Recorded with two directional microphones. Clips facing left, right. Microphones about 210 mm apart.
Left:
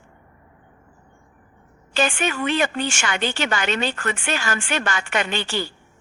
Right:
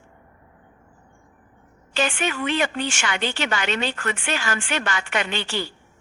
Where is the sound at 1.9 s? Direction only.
45° left (ahead or behind).